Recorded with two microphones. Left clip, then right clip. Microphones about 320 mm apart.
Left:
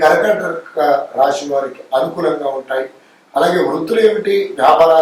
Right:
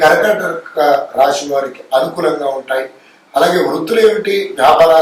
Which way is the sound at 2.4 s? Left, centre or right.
Left.